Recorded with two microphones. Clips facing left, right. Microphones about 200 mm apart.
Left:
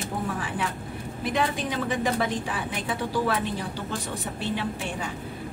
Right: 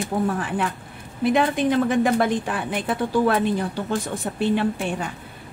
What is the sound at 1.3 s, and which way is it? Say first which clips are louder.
Speech: right 7 dB; 55° right (ahead or behind).